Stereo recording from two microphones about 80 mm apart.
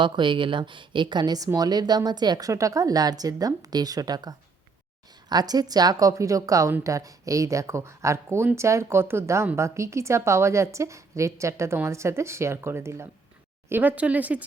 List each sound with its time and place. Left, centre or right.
0.0 s a woman's voice: right
2.5 s a woman's voice: right
13.7 s speech: right